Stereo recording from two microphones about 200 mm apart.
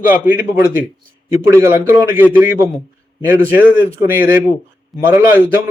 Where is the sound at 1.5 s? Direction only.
15° right (ahead or behind).